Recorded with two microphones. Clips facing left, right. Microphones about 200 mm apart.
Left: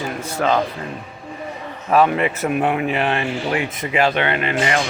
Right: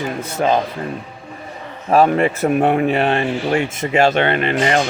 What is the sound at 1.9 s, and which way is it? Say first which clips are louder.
Speech: right 3 dB; 40° right (ahead or behind).